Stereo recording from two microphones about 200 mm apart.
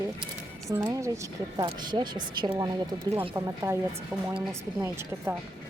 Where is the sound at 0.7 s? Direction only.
15° right (ahead or behind).